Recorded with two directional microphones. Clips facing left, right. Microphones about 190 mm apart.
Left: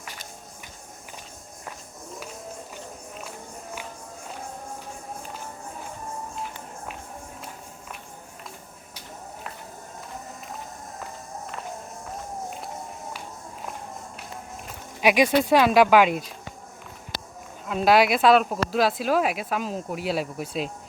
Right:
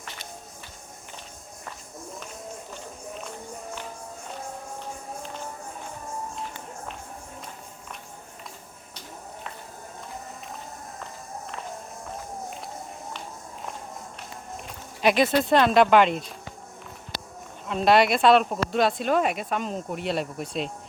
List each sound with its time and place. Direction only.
14.7 s speech: 10° left (ahead or behind)
17.7 s a woman's voice: 5° left (ahead or behind)